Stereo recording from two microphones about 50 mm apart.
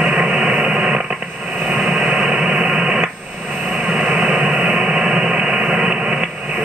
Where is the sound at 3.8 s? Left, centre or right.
Centre.